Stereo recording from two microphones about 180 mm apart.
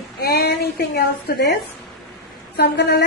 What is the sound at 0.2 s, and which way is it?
A woman's voice, 60° left (ahead or behind).